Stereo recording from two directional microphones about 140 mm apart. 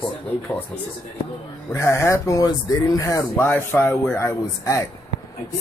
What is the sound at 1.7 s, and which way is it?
Speech, 20° left (ahead or behind).